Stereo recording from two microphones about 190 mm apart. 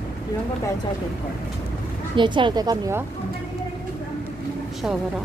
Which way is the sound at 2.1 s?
25° right (ahead or behind).